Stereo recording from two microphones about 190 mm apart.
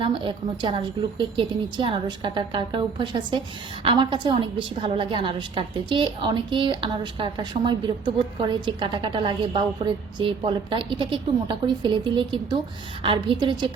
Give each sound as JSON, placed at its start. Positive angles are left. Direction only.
{"t": 0.0, "sound": "a woman's voice", "side_deg": -25}